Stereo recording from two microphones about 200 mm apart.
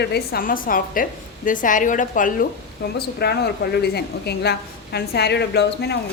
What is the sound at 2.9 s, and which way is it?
A woman's voice, 50° left (ahead or behind).